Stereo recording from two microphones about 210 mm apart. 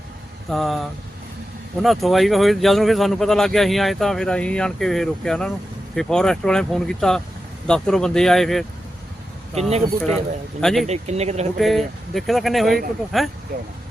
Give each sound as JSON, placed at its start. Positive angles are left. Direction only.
{"t": 0.5, "sound": "speech", "side_deg": 0}
{"t": 9.6, "sound": "speech", "side_deg": -30}
{"t": 10.6, "sound": "speech", "side_deg": 0}
{"t": 10.8, "sound": "speech", "side_deg": -30}
{"t": 11.5, "sound": "speech", "side_deg": 0}